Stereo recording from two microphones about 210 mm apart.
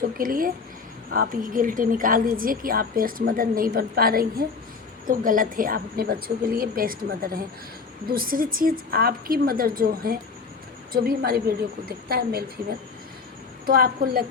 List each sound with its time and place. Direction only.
0.2 s a woman's voice: 40° right (ahead or behind)
13.7 s a woman's voice: 45° right (ahead or behind)